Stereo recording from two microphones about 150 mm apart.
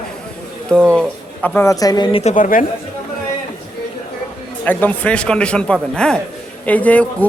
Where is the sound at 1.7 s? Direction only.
25° left (ahead or behind).